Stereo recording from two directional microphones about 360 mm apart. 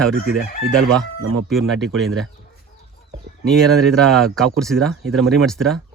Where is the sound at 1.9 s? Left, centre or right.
Centre.